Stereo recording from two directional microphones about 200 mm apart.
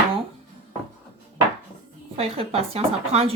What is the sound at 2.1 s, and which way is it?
Speech, 30° right (ahead or behind).